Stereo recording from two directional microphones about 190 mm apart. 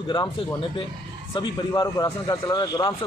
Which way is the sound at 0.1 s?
20° left (ahead or behind).